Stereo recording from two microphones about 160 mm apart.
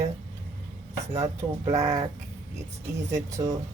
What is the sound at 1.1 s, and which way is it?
Speech, 20° right (ahead or behind).